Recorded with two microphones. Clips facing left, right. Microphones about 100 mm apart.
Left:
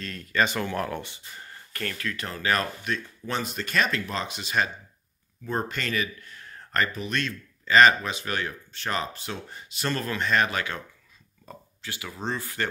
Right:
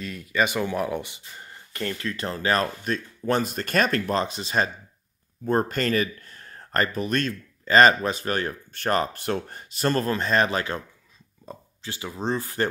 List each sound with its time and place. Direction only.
0.0 s speech: 10° right (ahead or behind); by 4.6 s 35° right (ahead or behind)
5.4 s speech: 45° right (ahead or behind)